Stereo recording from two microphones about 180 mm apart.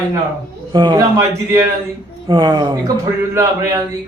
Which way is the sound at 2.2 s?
25° right (ahead or behind).